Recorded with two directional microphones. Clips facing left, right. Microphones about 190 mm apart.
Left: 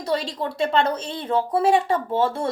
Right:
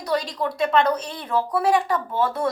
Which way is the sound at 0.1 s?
25° left (ahead or behind).